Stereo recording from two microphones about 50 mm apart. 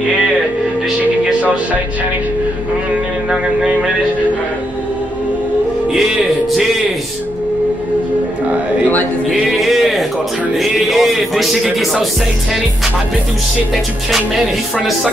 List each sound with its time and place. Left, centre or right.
1.4 s music: right
3.3 s music: centre
9.5 s a sound: centre
10.5 s speech: centre
14.1 s speech: centre